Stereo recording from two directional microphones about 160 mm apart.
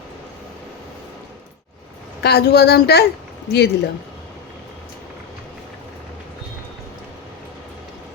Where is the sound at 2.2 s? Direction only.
90° left.